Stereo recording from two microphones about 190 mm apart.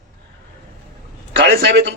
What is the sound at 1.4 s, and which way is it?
Speech, 60° right (ahead or behind).